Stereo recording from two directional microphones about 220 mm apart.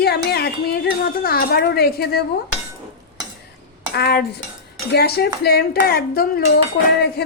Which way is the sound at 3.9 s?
45° left (ahead or behind).